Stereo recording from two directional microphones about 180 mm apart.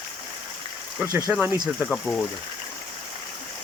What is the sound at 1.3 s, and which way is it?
Speech, 5° right (ahead or behind).